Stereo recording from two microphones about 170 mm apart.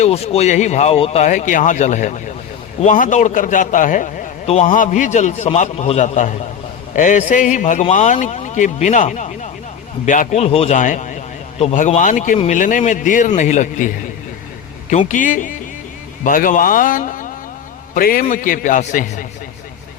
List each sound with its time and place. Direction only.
0.0 s a man's voice: 40° left (ahead or behind)